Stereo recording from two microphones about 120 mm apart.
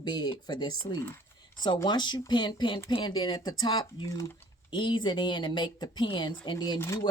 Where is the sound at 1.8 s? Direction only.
40° left (ahead or behind).